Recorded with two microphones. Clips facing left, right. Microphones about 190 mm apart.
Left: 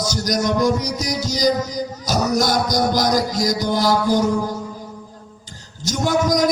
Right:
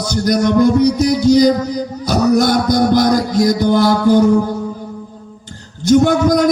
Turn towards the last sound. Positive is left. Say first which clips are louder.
# right 5 dB
turn(degrees=-55)  # may be behind; listen again after turning